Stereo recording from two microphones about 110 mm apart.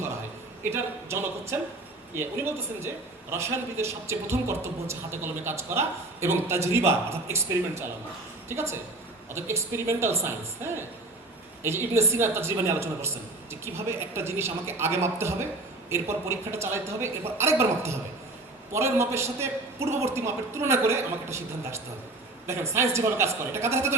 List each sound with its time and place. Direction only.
0.7 s a man's voice: 25° right (ahead or behind)